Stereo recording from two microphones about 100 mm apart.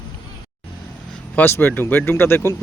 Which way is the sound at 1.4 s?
20° left (ahead or behind).